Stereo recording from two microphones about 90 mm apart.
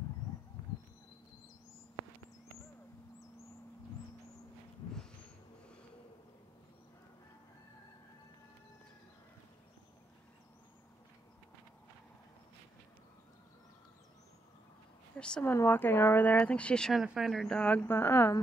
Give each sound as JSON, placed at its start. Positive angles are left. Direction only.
{"t": 15.1, "sound": "speech", "side_deg": 10}
{"t": 15.4, "sound": "speech", "side_deg": 25}
{"t": 16.9, "sound": "speech", "side_deg": -5}
{"t": 17.6, "sound": "speech", "side_deg": 15}